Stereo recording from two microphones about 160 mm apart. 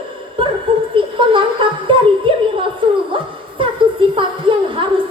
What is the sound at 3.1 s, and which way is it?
Music, 30° right (ahead or behind).